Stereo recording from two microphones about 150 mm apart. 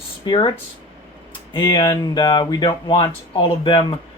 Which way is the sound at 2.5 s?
30° left (ahead or behind).